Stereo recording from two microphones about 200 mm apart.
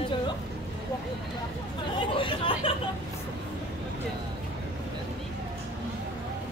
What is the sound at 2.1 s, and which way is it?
Chatter, 25° left (ahead or behind).